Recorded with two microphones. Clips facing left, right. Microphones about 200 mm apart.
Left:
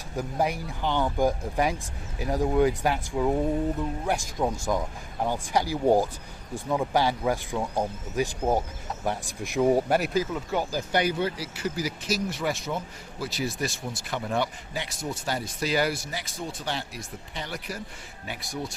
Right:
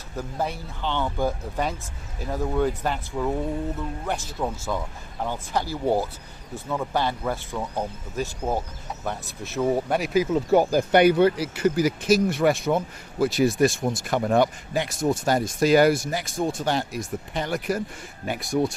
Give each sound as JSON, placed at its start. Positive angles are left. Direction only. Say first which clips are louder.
{"t": 0.2, "sound": "speech", "louder": "left 2 dB", "side_deg": 15}
{"t": 10.5, "sound": "speech", "louder": "right 9 dB", "side_deg": -50}